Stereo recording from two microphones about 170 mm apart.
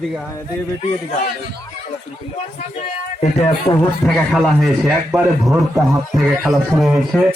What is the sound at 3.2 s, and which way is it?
Speech, 35° left (ahead or behind).